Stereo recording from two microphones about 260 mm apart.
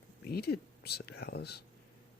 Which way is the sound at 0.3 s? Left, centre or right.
Left.